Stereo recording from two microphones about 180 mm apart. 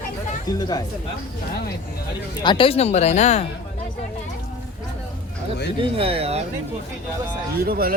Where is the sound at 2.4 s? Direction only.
30° left (ahead or behind).